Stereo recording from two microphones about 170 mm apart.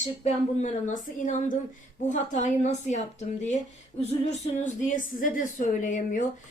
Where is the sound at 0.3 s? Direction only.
45° left (ahead or behind).